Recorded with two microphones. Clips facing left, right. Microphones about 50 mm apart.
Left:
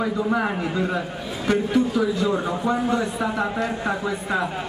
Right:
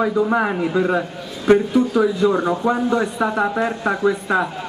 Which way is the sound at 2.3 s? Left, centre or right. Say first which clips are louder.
Right 4 dB; centre.